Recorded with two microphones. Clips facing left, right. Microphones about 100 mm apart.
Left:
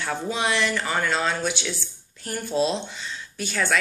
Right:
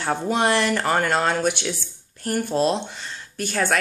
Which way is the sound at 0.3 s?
50° right (ahead or behind).